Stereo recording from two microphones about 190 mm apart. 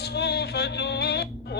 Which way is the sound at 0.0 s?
60° left (ahead or behind).